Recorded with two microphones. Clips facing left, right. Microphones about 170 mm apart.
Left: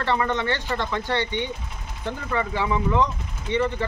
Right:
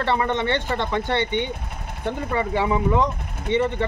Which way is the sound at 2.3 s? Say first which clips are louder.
Right 2 dB; 25° right (ahead or behind).